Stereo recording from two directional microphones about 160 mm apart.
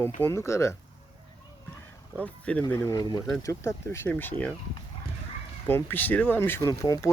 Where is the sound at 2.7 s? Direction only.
20° left (ahead or behind).